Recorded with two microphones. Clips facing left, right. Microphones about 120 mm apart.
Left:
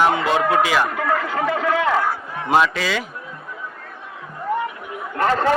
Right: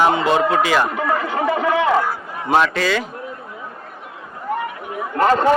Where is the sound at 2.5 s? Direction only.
5° left (ahead or behind).